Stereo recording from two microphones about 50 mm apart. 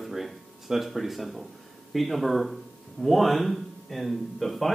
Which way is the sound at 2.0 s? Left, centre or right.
Centre.